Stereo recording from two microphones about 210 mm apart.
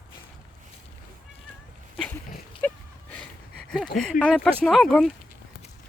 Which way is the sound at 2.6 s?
10° left (ahead or behind).